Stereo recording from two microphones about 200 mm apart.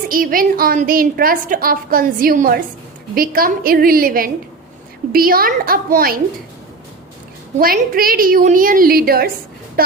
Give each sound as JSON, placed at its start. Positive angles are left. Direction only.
{"t": 0.1, "sound": "a woman's voice", "side_deg": -45}
{"t": 7.6, "sound": "a woman's voice", "side_deg": -45}